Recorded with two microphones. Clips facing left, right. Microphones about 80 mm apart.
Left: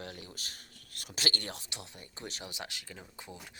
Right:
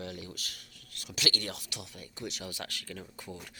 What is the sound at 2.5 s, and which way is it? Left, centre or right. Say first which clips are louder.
Speech: right 3 dB; left.